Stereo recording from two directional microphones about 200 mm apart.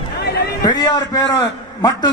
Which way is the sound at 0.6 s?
20° left (ahead or behind).